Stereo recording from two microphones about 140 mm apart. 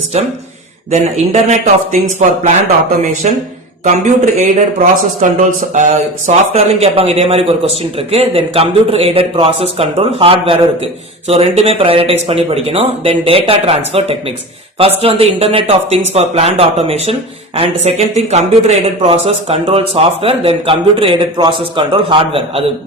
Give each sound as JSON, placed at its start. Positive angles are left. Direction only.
{"t": 0.1, "sound": "speech", "side_deg": -50}
{"t": 5.2, "sound": "speech", "side_deg": -70}
{"t": 5.9, "sound": "speech", "side_deg": -50}